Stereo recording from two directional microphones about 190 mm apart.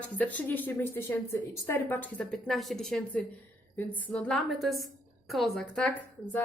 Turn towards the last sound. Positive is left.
turn(degrees=5)  # may be behind; listen again after turning